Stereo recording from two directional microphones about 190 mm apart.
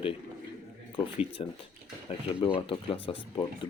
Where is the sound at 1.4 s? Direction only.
25° left (ahead or behind).